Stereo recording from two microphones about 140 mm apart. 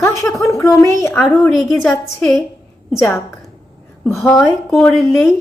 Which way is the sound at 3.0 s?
20° left (ahead or behind).